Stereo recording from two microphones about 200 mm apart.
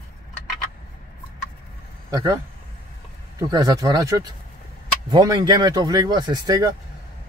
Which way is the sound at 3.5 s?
20° right (ahead or behind).